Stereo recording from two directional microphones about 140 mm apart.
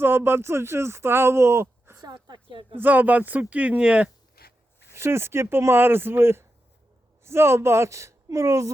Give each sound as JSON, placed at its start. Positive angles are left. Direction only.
{"t": 0.0, "sound": "speech", "side_deg": -15}
{"t": 2.7, "sound": "speech", "side_deg": -15}
{"t": 4.4, "sound": "a sound", "side_deg": 90}
{"t": 4.9, "sound": "speech", "side_deg": -15}